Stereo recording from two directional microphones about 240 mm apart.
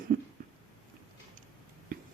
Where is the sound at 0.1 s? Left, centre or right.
Right.